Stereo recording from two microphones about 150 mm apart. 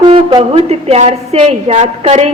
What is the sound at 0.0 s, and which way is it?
A woman's voice, 35° right (ahead or behind).